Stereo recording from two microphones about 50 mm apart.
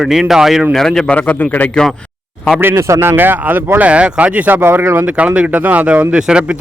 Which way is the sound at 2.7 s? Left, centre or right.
Right.